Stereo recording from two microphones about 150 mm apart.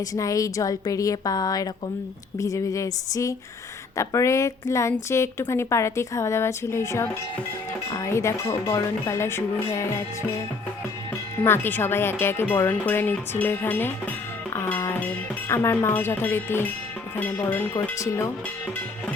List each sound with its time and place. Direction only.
0.0 s a woman's voice: 20° left (ahead or behind)
11.4 s speech: 15° left (ahead or behind)
17.9 s a woman's voice: 20° left (ahead or behind)